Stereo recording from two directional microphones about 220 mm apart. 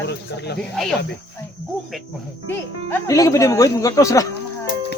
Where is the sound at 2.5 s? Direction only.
15° left (ahead or behind).